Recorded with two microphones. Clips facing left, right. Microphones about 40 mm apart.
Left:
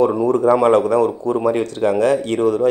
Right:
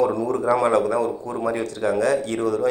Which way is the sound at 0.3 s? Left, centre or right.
Left.